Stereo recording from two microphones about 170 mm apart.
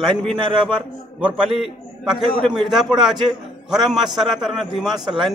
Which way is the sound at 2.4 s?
Centre (ahead or behind).